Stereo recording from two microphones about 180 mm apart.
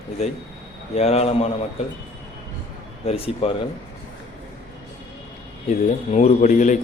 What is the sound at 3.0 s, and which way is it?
Speech, 35° left (ahead or behind).